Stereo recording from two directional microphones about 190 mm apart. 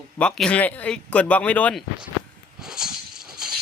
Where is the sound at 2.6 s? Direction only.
5° right (ahead or behind).